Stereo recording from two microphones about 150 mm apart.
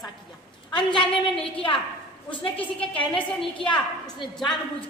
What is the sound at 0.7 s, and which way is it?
A woman's voice, 30° left (ahead or behind).